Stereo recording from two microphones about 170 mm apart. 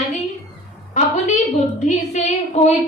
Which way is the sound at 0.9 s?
45° left (ahead or behind).